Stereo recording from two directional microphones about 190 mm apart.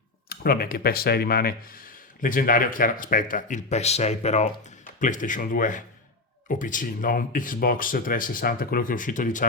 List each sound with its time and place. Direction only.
0.3 s speech: 50° left (ahead or behind)